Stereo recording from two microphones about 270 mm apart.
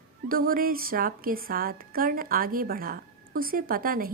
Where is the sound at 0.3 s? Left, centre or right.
Right.